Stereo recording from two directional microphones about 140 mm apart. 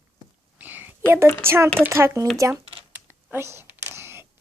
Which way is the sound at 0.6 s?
15° right (ahead or behind).